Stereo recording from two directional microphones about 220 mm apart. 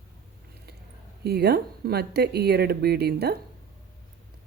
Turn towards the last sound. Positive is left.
turn(degrees=-45)  # may be behind; listen again after turning